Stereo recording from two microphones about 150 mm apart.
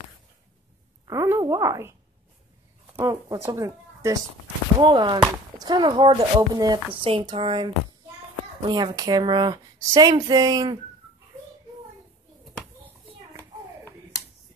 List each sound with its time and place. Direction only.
1.0 s a sound: 20° right (ahead or behind)
1.4 s speech: 25° right (ahead or behind)
3.0 s speech: 20° right (ahead or behind)
4.7 s speech: 30° right (ahead or behind)
12.8 s children playing: 20° right (ahead or behind)